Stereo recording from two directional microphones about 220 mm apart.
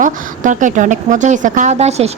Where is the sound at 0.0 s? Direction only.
35° right (ahead or behind).